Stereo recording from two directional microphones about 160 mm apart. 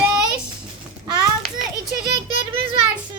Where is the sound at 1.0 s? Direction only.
25° right (ahead or behind).